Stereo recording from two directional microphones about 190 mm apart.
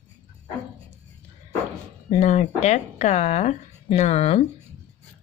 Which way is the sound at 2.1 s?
40° left (ahead or behind).